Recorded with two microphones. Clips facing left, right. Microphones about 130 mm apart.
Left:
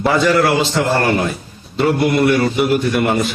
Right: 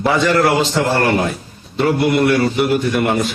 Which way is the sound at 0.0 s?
Centre (ahead or behind).